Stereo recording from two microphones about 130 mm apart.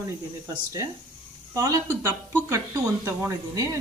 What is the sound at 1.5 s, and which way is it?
Speech, 25° right (ahead or behind).